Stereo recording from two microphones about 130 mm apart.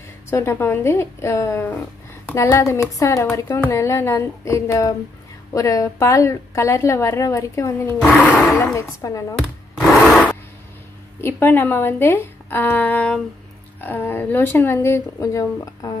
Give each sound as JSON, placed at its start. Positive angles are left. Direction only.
{"t": 0.3, "sound": "speech", "side_deg": 20}
{"t": 8.2, "sound": "speech", "side_deg": 15}
{"t": 9.4, "sound": "blender", "side_deg": 0}
{"t": 11.1, "sound": "speech", "side_deg": 15}